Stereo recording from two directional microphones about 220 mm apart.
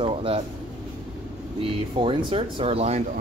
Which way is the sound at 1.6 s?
25° right (ahead or behind).